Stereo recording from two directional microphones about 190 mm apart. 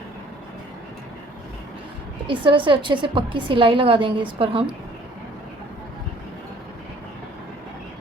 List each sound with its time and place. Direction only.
2.2 s a woman's voice: 25° right (ahead or behind)